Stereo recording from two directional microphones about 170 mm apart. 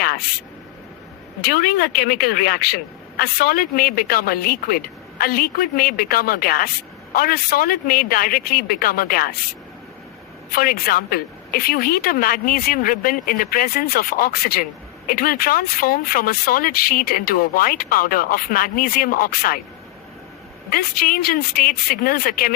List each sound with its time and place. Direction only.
1.5 s a woman's voice: 60° left (ahead or behind)
10.5 s a woman's voice: 60° left (ahead or behind)
20.7 s a woman's voice: 60° left (ahead or behind)